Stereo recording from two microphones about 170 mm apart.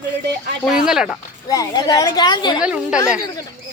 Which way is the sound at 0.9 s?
5° right (ahead or behind).